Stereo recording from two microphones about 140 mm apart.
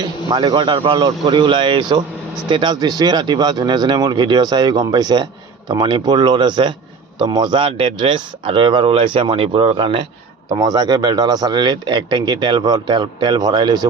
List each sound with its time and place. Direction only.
0.0 s speech: 30° right (ahead or behind)